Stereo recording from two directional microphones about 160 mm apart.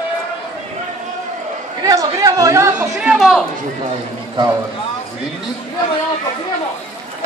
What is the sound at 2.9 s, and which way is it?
Speech, centre (ahead or behind).